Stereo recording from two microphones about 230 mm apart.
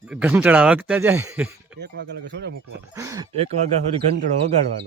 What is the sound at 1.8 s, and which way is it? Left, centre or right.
Speech, right.